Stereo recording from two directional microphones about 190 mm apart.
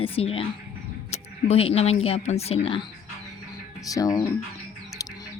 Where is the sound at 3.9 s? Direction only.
20° left (ahead or behind).